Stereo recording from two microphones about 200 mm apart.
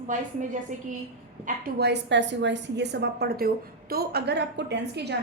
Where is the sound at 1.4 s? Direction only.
50° right (ahead or behind).